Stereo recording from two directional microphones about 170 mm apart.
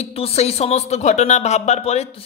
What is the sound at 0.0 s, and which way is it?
A man's voice, 35° left (ahead or behind).